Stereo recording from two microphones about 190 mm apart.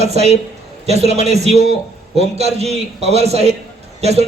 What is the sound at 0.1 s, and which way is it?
Speech, 35° right (ahead or behind).